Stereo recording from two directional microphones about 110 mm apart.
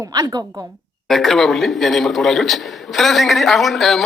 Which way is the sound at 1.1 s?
5° left (ahead or behind).